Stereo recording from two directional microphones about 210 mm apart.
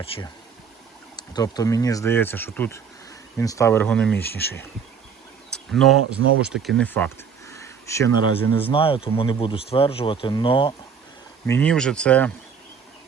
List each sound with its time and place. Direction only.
0.0 s speech: 25° left (ahead or behind); by 4.6 s 10° left (ahead or behind)
5.7 s speech: centre (ahead or behind)
8.7 s speech: 25° left (ahead or behind)
11.4 s speech: 10° left (ahead or behind)